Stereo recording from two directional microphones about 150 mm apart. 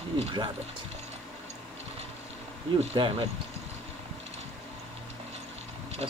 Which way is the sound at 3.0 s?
30° right (ahead or behind).